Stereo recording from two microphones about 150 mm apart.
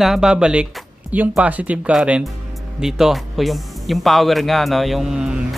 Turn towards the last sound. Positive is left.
turn(degrees=-5)  # may be behind; listen again after turning